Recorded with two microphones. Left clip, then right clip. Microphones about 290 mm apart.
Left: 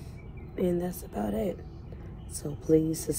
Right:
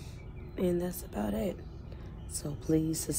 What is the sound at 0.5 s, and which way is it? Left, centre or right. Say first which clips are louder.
Speech: left 2 dB; centre.